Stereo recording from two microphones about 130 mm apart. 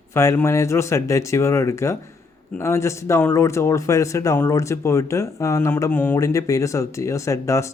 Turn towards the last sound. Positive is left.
turn(degrees=25)  # may be behind; listen again after turning